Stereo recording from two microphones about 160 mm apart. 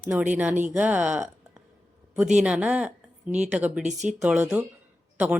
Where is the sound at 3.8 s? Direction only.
50° right (ahead or behind).